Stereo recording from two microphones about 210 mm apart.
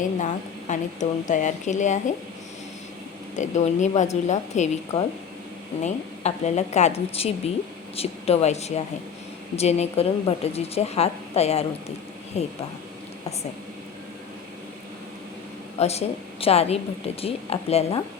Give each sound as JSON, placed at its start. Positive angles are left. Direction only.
{"t": 0.7, "sound": "a woman's voice", "side_deg": 35}
{"t": 3.3, "sound": "a woman's voice", "side_deg": 35}
{"t": 15.8, "sound": "a woman's voice", "side_deg": 30}